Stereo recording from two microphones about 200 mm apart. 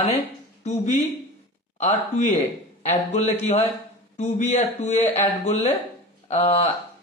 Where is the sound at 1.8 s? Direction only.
35° left (ahead or behind).